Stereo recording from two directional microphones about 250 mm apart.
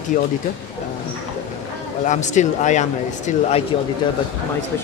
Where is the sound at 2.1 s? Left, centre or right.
Left.